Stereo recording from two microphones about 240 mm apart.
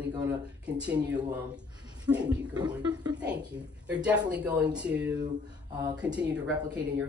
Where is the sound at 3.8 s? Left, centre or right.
Centre.